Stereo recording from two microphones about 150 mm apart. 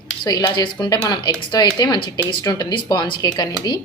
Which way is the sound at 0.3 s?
25° left (ahead or behind).